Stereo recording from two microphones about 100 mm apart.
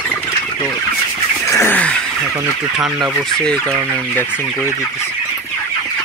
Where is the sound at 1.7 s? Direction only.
15° left (ahead or behind).